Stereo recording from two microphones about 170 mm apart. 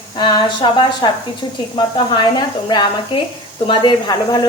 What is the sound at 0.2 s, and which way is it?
Speech, 25° left (ahead or behind).